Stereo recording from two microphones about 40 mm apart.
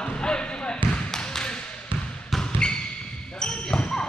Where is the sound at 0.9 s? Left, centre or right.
Centre.